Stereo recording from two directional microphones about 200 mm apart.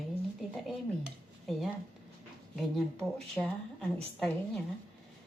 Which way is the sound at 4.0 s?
5° left (ahead or behind).